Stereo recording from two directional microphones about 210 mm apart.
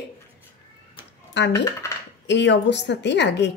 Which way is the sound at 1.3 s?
55° left (ahead or behind).